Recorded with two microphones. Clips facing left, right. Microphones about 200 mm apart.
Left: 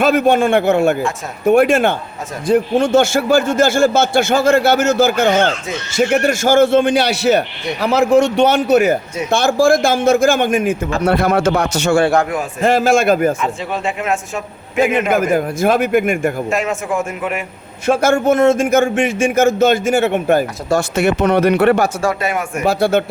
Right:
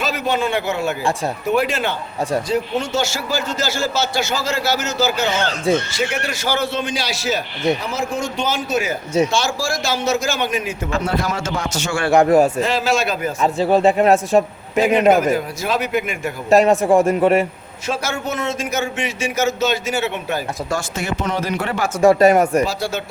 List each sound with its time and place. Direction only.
0.0 s a man's voice: 55° left (ahead or behind)
12.6 s a man's voice: 50° left (ahead or behind)
13.4 s speech: 35° right (ahead or behind)
15.1 s a man's voice: 50° left (ahead or behind)
16.5 s speech: 35° right (ahead or behind)
17.8 s a man's voice: 55° left (ahead or behind)
20.7 s a man's voice: 65° left (ahead or behind)
22.2 s speech: 40° right (ahead or behind)
22.6 s a man's voice: 60° left (ahead or behind)